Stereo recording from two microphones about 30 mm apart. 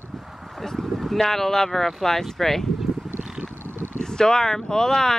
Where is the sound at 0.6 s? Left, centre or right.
Centre.